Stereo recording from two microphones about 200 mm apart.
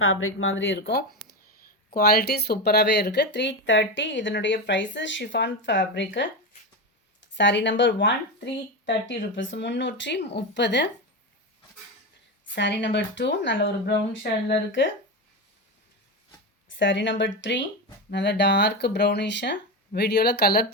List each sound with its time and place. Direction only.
0.0 s speech: 90° left; by 10.8 s 60° left (ahead or behind)
12.5 s speech: 60° left (ahead or behind)
16.6 s speech: 65° left (ahead or behind)